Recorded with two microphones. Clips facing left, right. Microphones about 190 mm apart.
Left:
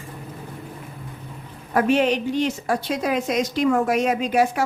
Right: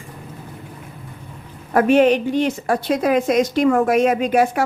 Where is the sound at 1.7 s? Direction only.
50° right (ahead or behind).